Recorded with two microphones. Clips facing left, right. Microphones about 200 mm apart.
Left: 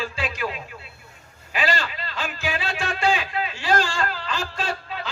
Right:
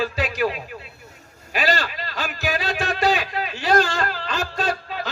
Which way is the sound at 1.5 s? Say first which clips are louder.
Right 2 dB; 40° right (ahead or behind).